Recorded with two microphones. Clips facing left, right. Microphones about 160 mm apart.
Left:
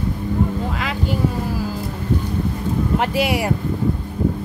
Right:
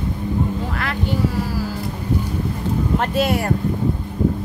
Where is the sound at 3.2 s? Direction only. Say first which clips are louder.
Right 2 dB; 10° left (ahead or behind).